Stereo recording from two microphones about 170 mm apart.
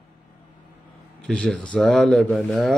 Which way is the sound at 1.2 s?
5° left (ahead or behind).